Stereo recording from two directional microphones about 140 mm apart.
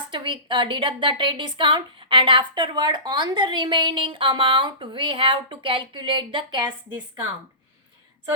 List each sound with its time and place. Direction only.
0.1 s a woman's voice: 35° right (ahead or behind)